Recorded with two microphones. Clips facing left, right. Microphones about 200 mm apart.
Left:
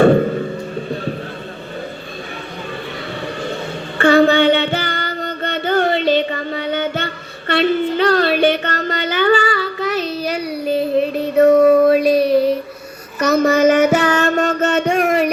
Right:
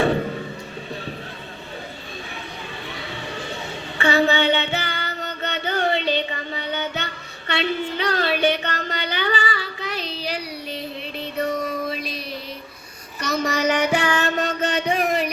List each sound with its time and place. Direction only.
3.9 s music: 50° left (ahead or behind)
11.0 s a sound: 50° left (ahead or behind)
13.6 s music: 40° left (ahead or behind)